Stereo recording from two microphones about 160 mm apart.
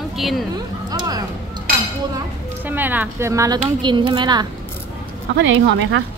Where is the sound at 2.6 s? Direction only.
10° right (ahead or behind); by 4.5 s 25° right (ahead or behind).